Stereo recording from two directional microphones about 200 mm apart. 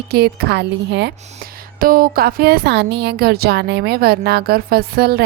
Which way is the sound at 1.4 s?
45° right (ahead or behind).